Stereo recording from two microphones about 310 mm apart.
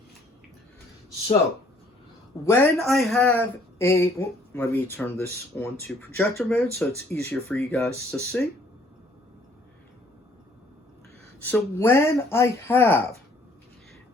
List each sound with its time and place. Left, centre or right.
2.4 s a man's voice: centre
11.4 s a man's voice: centre